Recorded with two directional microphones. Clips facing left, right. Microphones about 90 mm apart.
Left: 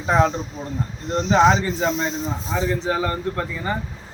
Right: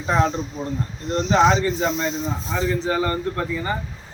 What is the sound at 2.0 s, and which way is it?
Speech, 25° left (ahead or behind).